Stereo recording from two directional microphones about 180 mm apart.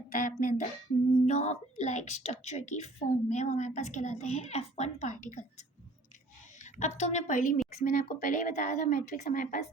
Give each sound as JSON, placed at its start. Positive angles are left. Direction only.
{"t": 0.2, "sound": "a sound", "side_deg": 50}
{"t": 1.2, "sound": "a woman's voice", "side_deg": 40}
{"t": 6.7, "sound": "a woman's voice", "side_deg": 40}